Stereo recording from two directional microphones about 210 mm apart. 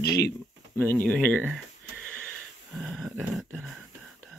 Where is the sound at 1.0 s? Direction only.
5° left (ahead or behind).